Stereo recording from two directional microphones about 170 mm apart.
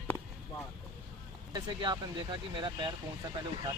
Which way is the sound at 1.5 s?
25° right (ahead or behind).